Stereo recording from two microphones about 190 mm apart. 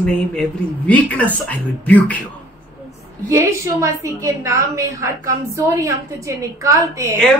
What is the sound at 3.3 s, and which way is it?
Speech, 15° right (ahead or behind).